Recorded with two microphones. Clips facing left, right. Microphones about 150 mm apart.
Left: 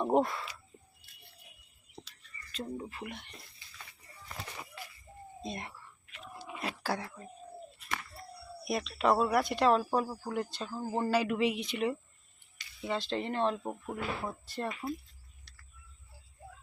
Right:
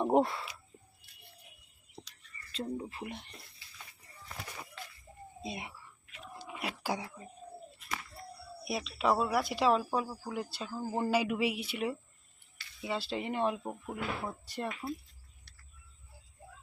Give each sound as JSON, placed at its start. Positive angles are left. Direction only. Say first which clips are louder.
{"t": 0.0, "sound": "speech", "louder": "right 1 dB", "side_deg": -20}
{"t": 2.5, "sound": "speech", "louder": "right 2 dB", "side_deg": -30}
{"t": 4.8, "sound": "a sound", "louder": "even", "side_deg": 10}
{"t": 5.4, "sound": "speech", "louder": "left 1 dB", "side_deg": -5}
{"t": 6.8, "sound": "speech", "louder": "left 1 dB", "side_deg": -15}
{"t": 8.6, "sound": "speech", "louder": "left 2 dB", "side_deg": 0}
{"t": 13.6, "sound": "speech", "louder": "left 2 dB", "side_deg": 10}
{"t": 13.9, "sound": "speech", "louder": "even", "side_deg": 0}
{"t": 14.4, "sound": "speech", "louder": "left 1 dB", "side_deg": -15}
{"t": 14.7, "sound": "speech", "louder": "left 1 dB", "side_deg": 0}